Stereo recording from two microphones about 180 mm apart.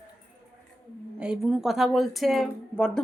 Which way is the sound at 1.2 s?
5° right (ahead or behind).